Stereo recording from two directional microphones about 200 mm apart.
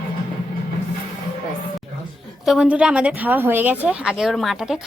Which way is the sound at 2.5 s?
5° right (ahead or behind).